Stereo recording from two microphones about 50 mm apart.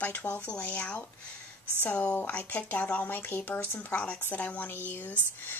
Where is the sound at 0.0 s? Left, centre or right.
Left.